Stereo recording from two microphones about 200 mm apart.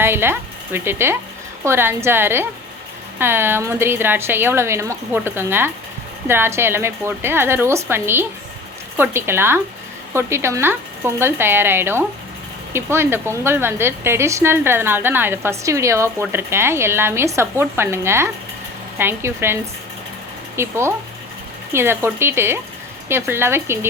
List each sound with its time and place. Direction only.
0.0 s a woman's voice: 10° right (ahead or behind)
20.6 s a woman's voice: 15° right (ahead or behind)